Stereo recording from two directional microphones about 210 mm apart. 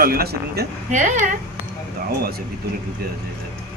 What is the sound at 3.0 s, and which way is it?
Speech, 50° right (ahead or behind).